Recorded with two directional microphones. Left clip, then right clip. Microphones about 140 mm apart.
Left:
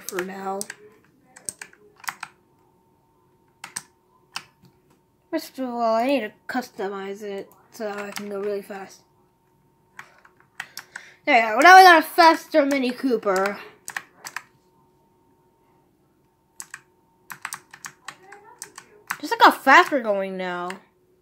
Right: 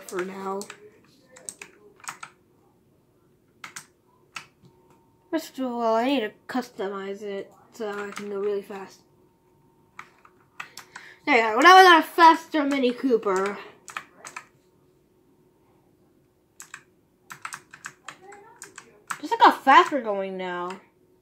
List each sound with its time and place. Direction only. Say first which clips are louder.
0.3 s a woman's voice: left 2 dB; 20° left (ahead or behind)
1.3 s computer keyboard: left 3 dB; 30° left (ahead or behind)
5.3 s a woman's voice: left 1 dB; 15° left (ahead or behind)
11.2 s a woman's voice: left 2 dB; 20° left (ahead or behind)
13.8 s computer keyboard: left 6 dB; 50° left (ahead or behind)
17.4 s computer keyboard: left 2 dB; 40° left (ahead or behind)
19.0 s speech: left 2 dB; 40° left (ahead or behind)